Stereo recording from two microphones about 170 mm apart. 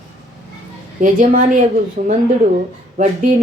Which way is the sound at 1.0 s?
50° right (ahead or behind).